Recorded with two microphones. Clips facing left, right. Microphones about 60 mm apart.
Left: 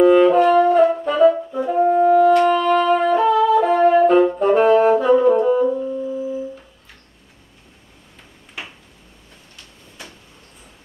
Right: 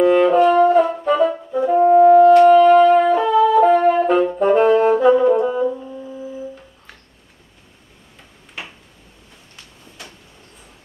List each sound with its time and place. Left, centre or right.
0.0 s french horn: centre
0.4 s brass instrument: right
0.7 s brass instrument: centre
2.0 s music: centre
2.4 s wind instrument: centre
3.2 s brass instrument: centre
4.4 s saxophone: centre